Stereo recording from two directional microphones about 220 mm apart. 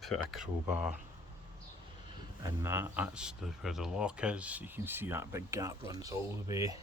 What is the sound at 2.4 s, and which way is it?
Speech, 10° right (ahead or behind).